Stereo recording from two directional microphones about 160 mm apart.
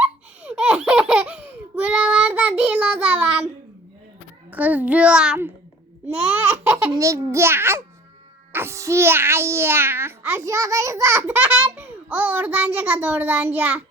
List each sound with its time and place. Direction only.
0.0 s baby laughter: 5° right (ahead or behind)
4.5 s a sound: 10° right (ahead or behind)
6.1 s baby laughter: 10° right (ahead or behind)
6.9 s a child's voice: 20° right (ahead or behind)